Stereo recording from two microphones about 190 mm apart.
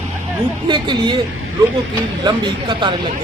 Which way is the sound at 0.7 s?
25° right (ahead or behind).